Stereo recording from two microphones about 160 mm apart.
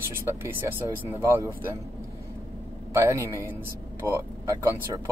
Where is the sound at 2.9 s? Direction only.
20° right (ahead or behind).